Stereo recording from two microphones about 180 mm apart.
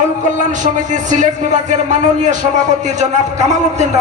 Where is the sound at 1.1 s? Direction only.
40° right (ahead or behind).